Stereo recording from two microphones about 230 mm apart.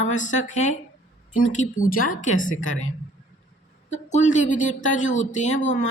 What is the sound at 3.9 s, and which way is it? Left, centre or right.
A woman's voice, left.